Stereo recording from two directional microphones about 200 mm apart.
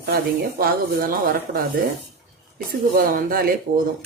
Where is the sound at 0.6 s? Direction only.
45° right (ahead or behind).